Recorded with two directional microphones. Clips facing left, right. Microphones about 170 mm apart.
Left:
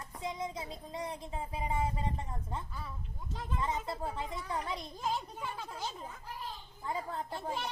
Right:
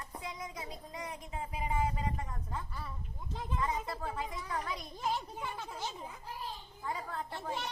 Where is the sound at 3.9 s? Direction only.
25° left (ahead or behind).